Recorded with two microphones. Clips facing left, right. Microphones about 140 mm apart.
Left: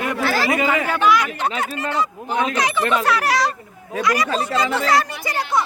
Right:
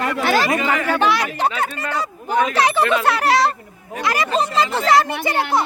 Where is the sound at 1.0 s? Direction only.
30° right (ahead or behind).